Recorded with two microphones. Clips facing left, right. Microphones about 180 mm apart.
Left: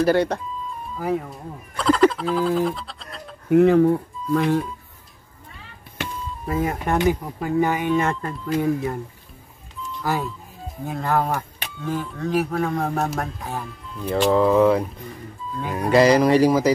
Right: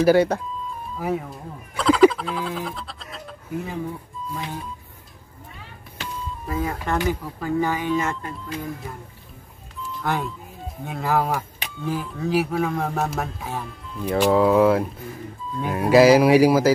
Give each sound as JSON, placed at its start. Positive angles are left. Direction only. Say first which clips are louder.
{"t": 0.0, "sound": "speech", "louder": "right 2 dB", "side_deg": -5}
{"t": 3.4, "sound": "speech", "louder": "left 15 dB", "side_deg": 70}
{"t": 6.4, "sound": "speech", "louder": "left 3 dB", "side_deg": 25}
{"t": 7.9, "sound": "speech", "louder": "left 3 dB", "side_deg": 35}
{"t": 8.5, "sound": "speech", "louder": "left 13 dB", "side_deg": 65}
{"t": 9.9, "sound": "speech", "louder": "left 1 dB", "side_deg": 0}